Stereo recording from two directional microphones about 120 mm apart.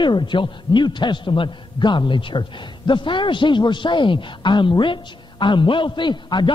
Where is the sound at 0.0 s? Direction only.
40° left (ahead or behind).